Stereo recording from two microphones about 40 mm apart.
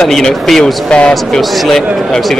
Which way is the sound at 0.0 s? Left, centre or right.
Centre.